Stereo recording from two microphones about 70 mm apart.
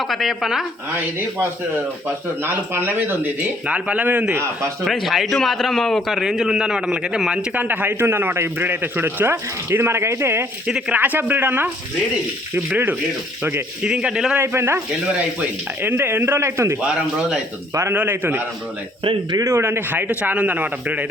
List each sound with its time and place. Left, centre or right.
0.0 s a man's voice: centre
1.4 s speech: right
3.7 s a man's voice: centre
4.9 s a man's voice: centre
7.5 s speech: right
10.7 s speech: centre
10.9 s a man's voice: right
13.8 s speech: centre
14.3 s speech: right
15.0 s speech: centre
15.8 s speech: right
16.8 s speech: centre
17.9 s a man's voice: right
19.5 s a man's voice: right